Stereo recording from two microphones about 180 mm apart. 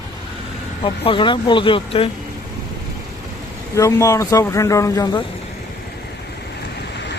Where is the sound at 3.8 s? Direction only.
15° left (ahead or behind).